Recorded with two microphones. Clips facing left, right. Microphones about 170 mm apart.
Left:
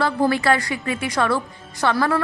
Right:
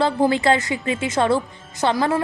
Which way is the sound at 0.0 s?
20° right (ahead or behind).